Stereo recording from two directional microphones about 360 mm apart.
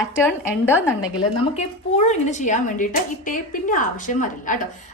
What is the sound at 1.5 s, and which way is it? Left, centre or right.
A woman's voice, centre.